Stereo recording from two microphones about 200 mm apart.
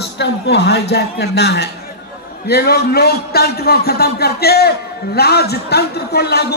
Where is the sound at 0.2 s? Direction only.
55° left (ahead or behind).